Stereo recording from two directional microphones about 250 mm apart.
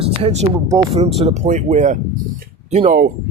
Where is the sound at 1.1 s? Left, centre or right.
Right.